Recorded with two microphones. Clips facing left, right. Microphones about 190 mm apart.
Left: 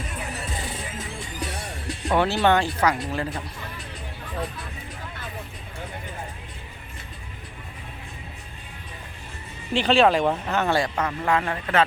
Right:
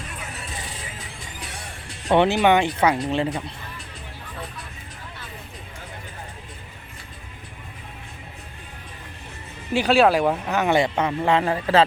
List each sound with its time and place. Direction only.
2.0 s speech: 20° right (ahead or behind)
9.7 s speech: 10° right (ahead or behind)
10.7 s speech: 20° right (ahead or behind)